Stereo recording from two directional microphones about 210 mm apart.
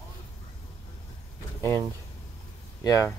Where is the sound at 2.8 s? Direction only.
15° left (ahead or behind).